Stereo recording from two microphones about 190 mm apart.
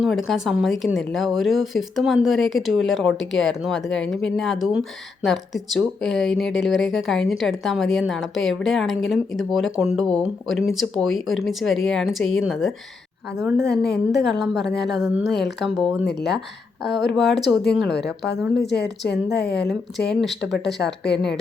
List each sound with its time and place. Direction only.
0.0 s speech: centre (ahead or behind)
13.7 s speech: 5° left (ahead or behind)
18.7 s a woman's voice: 60° left (ahead or behind)
20.7 s speech: centre (ahead or behind)